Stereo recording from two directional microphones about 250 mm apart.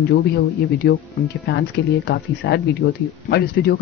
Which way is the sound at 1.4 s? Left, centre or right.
Left.